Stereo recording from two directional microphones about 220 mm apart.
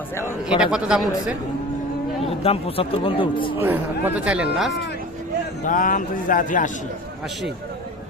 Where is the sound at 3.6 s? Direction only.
10° right (ahead or behind).